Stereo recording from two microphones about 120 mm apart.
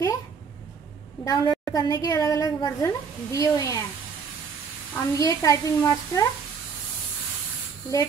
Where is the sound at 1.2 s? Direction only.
35° left (ahead or behind).